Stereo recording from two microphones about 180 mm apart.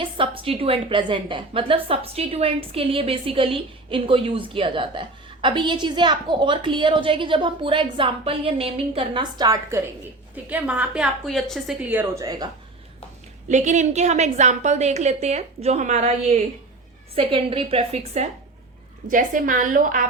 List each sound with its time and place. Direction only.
0.0 s a woman's voice: 30° right (ahead or behind); by 11.9 s centre (ahead or behind)
11.9 s a woman's voice: 15° right (ahead or behind)
13.5 s a woman's voice: 40° right (ahead or behind)
17.2 s a woman's voice: 30° right (ahead or behind)
19.0 s a woman's voice: 50° right (ahead or behind)